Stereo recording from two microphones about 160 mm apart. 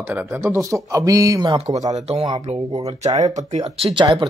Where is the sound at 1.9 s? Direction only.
40° right (ahead or behind).